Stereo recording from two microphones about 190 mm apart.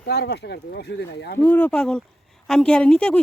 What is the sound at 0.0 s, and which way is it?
Speech, 60° left (ahead or behind).